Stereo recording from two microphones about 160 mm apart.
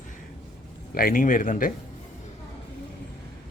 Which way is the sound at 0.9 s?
65° left (ahead or behind).